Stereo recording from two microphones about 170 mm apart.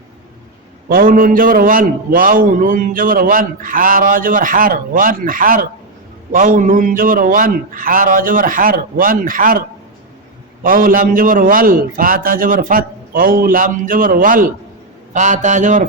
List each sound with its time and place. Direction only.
0.9 s a man's voice: 55° right (ahead or behind)